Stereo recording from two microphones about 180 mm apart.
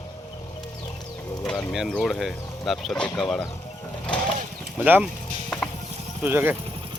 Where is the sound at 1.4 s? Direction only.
Centre (ahead or behind).